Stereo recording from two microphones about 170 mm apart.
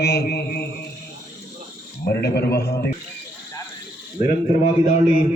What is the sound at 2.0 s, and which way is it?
Speech, 70° left (ahead or behind).